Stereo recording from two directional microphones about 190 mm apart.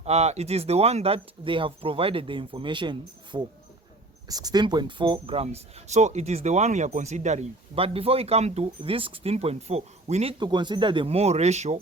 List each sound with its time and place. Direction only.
0.0 s speech: 35° right (ahead or behind)
10.4 s speech: 25° right (ahead or behind)